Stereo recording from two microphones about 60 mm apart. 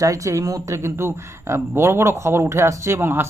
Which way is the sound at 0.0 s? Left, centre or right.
Right.